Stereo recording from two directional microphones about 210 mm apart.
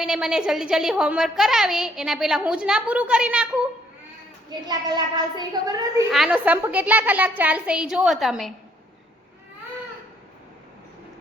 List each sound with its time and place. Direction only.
0.0 s a woman's voice: 5° right (ahead or behind)
4.4 s a child's voice: 20° right (ahead or behind)
6.1 s a woman's voice: 5° right (ahead or behind)